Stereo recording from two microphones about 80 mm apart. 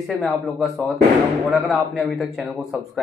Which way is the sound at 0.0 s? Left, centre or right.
Centre.